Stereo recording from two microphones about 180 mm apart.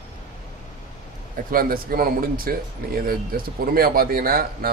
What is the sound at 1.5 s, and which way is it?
Speech, 55° right (ahead or behind).